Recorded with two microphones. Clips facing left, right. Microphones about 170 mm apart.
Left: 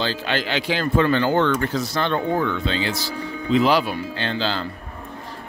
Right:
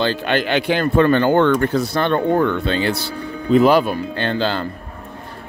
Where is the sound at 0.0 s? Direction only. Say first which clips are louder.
Right 5 dB; 55° right (ahead or behind).